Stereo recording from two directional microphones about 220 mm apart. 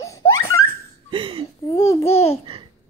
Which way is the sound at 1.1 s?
25° right (ahead or behind).